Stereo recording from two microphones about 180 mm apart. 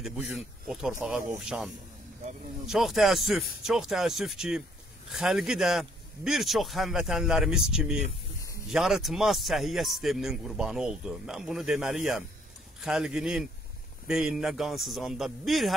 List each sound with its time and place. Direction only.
0.7 s speech: centre (ahead or behind)